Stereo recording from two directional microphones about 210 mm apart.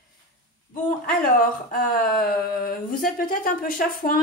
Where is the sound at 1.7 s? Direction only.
45° left (ahead or behind).